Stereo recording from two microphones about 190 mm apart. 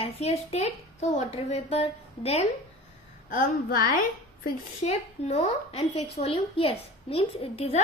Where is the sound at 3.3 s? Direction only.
45° left (ahead or behind).